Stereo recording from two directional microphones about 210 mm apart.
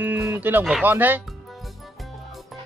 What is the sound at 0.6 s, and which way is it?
Music, 5° right (ahead or behind).